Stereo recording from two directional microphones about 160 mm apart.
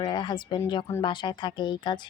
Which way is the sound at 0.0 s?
30° left (ahead or behind).